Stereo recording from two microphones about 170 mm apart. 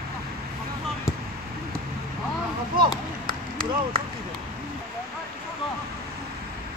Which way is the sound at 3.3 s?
60° right (ahead or behind).